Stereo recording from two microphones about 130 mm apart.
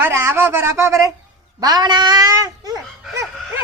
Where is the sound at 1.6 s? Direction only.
30° right (ahead or behind).